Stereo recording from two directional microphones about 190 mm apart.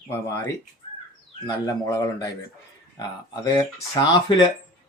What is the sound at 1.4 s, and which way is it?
Speech, 15° left (ahead or behind).